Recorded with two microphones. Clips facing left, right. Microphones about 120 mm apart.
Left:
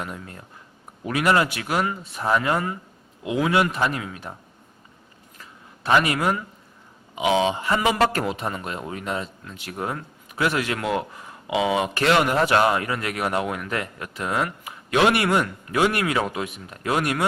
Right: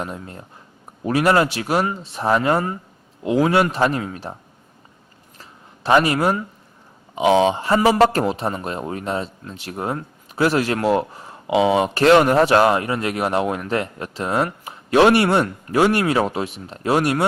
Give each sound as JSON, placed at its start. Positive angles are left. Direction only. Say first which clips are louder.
{"t": 0.0, "sound": "speech", "louder": "right 4 dB", "side_deg": -25}
{"t": 5.4, "sound": "a sound", "louder": "right 3 dB", "side_deg": -30}
{"t": 7.2, "sound": "speech", "louder": "right 5 dB", "side_deg": -35}